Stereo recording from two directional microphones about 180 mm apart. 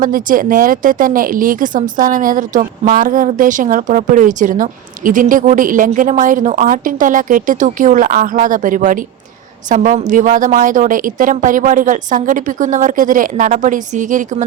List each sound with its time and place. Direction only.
0.0 s a woman's voice: 50° right (ahead or behind)